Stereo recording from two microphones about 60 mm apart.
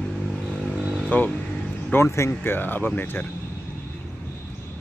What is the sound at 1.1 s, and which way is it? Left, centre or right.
Speech, left.